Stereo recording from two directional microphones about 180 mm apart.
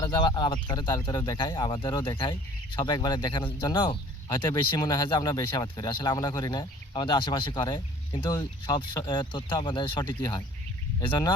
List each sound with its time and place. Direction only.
0.0 s speech: 25° left (ahead or behind)